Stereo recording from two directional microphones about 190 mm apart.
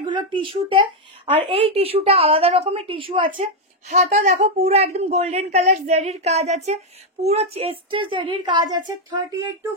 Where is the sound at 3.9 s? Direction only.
40° right (ahead or behind); by 9.3 s 20° right (ahead or behind).